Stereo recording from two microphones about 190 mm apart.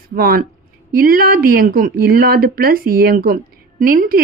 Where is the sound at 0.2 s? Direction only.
50° right (ahead or behind).